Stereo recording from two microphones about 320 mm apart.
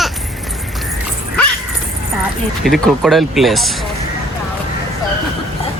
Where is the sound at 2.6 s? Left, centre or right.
Centre.